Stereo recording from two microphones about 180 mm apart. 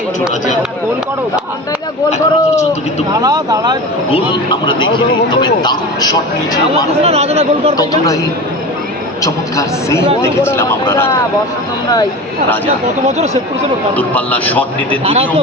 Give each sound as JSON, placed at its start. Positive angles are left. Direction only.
{"t": 2.0, "sound": "speech", "side_deg": 40}
{"t": 3.1, "sound": "speech", "side_deg": -20}
{"t": 4.1, "sound": "a man's voice", "side_deg": 25}
{"t": 7.0, "sound": "speech", "side_deg": -35}
{"t": 7.8, "sound": "a man's voice", "side_deg": 20}
{"t": 9.2, "sound": "a man's voice", "side_deg": 15}
{"t": 13.1, "sound": "speech", "side_deg": -35}
{"t": 13.9, "sound": "a man's voice", "side_deg": 10}
{"t": 15.0, "sound": "speech", "side_deg": -30}